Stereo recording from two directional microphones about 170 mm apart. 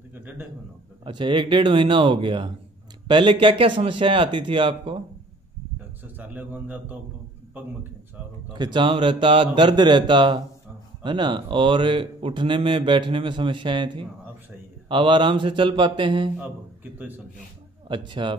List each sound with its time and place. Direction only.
0.1 s a man's voice: 10° right (ahead or behind)
1.0 s a man's voice: 30° right (ahead or behind)
6.0 s a man's voice: 10° right (ahead or behind)
8.5 s a man's voice: 25° right (ahead or behind)
17.8 s a man's voice: 30° right (ahead or behind)